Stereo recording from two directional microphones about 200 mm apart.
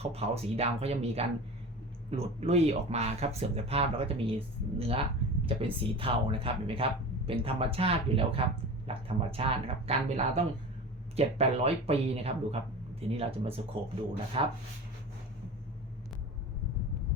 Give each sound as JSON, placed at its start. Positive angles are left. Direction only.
{"t": 0.0, "sound": "speech", "side_deg": -30}